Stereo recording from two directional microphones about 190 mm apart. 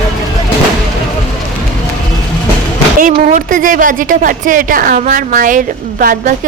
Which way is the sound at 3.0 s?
45° right (ahead or behind).